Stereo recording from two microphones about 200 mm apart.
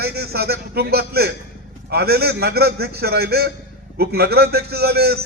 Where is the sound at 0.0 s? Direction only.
50° right (ahead or behind).